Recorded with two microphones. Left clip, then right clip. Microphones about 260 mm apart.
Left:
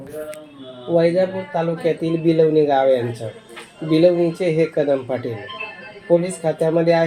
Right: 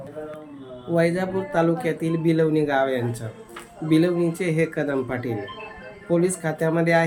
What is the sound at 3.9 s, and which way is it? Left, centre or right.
Speech, centre.